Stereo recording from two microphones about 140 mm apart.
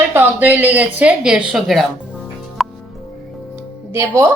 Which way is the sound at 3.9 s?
20° right (ahead or behind).